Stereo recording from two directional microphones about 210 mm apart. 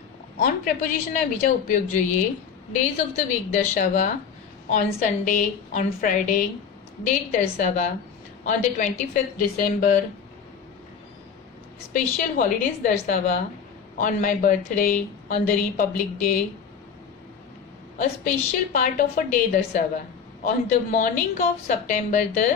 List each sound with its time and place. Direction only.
0.4 s a woman's voice: 40° left (ahead or behind)
11.9 s a woman's voice: 40° left (ahead or behind)
17.9 s a woman's voice: 40° left (ahead or behind)
20.4 s a woman's voice: 40° left (ahead or behind)